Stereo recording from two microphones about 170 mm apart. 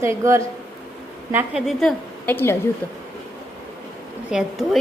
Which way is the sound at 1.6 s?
5° left (ahead or behind).